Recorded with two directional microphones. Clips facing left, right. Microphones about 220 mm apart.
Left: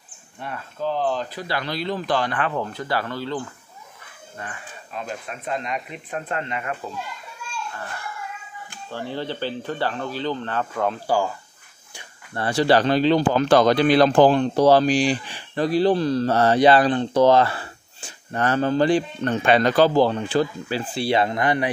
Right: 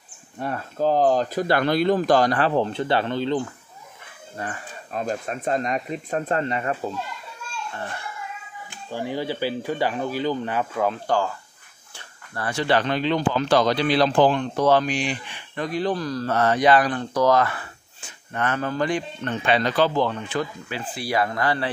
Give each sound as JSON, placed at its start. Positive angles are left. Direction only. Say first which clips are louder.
{"t": 0.4, "sound": "speech", "louder": "right 5 dB", "side_deg": -40}
{"t": 4.4, "sound": "speech", "louder": "right 4 dB", "side_deg": -40}
{"t": 8.9, "sound": "speech", "louder": "right 2 dB", "side_deg": -10}
{"t": 11.1, "sound": "speech", "louder": "left 1 dB", "side_deg": 10}
{"t": 12.4, "sound": "speech", "louder": "left 4 dB", "side_deg": 35}
{"t": 13.4, "sound": "speech", "louder": "left 3 dB", "side_deg": 50}